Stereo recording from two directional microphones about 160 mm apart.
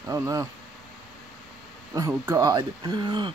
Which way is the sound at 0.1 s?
20° right (ahead or behind).